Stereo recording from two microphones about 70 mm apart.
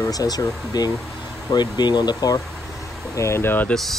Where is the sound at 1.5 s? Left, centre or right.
Left.